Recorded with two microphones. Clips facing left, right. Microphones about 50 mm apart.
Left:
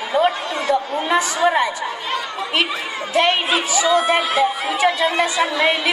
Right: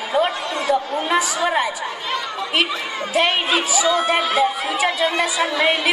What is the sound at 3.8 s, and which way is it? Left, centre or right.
Speech, centre.